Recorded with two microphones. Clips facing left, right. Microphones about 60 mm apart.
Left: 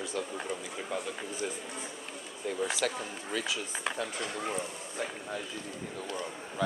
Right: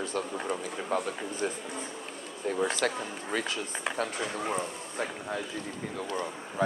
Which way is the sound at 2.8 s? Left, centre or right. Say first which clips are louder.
Right 1 dB; right.